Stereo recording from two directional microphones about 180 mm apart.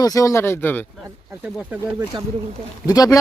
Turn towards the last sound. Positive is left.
turn(degrees=20)  # may be behind; listen again after turning